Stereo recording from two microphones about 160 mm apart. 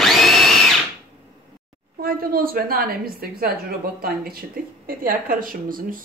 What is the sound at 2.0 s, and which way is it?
A woman's voice, 65° right (ahead or behind).